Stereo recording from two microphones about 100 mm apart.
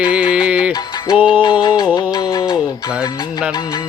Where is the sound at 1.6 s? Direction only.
45° left (ahead or behind).